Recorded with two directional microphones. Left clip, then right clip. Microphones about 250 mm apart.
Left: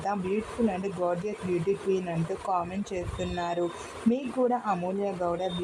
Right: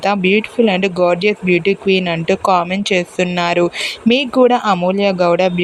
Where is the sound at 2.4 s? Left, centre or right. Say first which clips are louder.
Right 15 dB; right.